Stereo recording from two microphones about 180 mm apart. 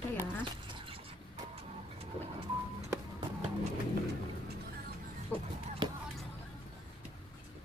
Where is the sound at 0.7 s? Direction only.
30° right (ahead or behind).